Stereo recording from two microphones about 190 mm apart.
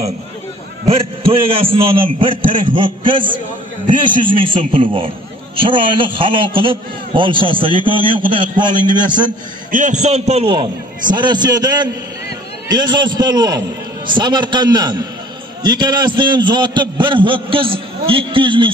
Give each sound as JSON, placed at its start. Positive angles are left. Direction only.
{"t": 0.8, "sound": "a man's voice", "side_deg": -30}
{"t": 9.7, "sound": "a man's voice", "side_deg": -40}